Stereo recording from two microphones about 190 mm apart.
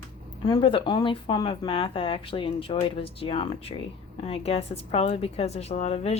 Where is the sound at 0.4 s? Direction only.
25° left (ahead or behind).